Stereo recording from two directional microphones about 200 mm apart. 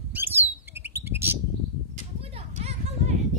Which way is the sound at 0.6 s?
10° right (ahead or behind).